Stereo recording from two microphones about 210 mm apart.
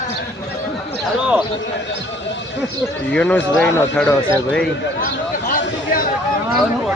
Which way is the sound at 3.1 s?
5° left (ahead or behind).